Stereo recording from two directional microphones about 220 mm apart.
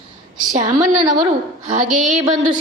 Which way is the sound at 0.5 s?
35° right (ahead or behind).